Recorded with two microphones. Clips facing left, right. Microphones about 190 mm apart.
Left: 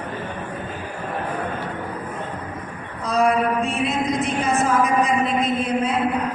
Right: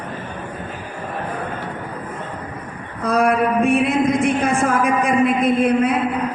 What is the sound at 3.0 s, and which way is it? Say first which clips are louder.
A woman's voice: right 2 dB; 55° right (ahead or behind).